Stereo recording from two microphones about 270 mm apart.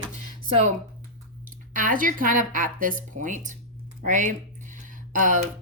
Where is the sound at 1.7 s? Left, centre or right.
Right.